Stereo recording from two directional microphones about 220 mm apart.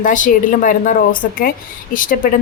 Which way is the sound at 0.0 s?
35° left (ahead or behind).